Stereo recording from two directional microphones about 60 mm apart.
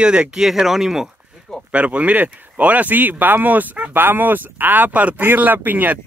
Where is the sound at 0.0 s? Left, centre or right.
Centre.